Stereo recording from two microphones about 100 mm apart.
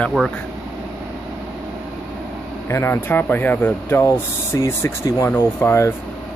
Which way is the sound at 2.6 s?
25° left (ahead or behind).